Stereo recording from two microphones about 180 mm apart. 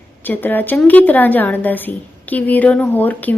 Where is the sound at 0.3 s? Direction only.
10° left (ahead or behind).